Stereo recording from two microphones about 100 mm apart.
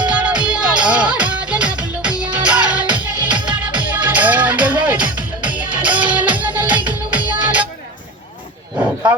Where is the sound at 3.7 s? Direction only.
15° right (ahead or behind).